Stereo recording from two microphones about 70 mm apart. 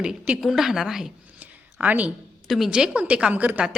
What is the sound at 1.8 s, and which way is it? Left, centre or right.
Speech, right.